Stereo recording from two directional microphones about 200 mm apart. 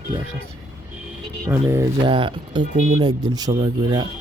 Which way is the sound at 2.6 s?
35° right (ahead or behind).